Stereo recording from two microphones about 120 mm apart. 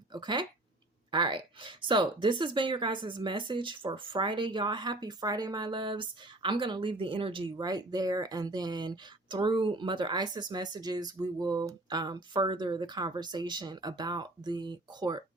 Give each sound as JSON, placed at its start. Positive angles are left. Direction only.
{"t": 0.1, "sound": "speech", "side_deg": -40}
{"t": 7.5, "sound": "speech", "side_deg": -35}